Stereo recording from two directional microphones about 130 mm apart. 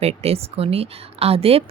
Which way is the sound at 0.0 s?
55° right (ahead or behind).